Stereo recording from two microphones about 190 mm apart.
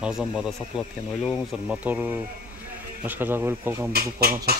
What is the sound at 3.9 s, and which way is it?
Speech, 55° right (ahead or behind).